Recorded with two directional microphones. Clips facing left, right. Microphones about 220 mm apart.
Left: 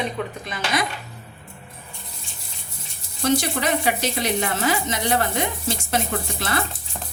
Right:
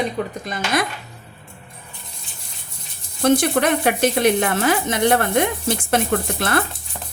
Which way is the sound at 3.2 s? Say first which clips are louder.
Right 5 dB; 55° right (ahead or behind).